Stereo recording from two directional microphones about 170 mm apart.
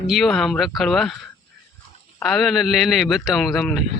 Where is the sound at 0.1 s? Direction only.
Centre (ahead or behind).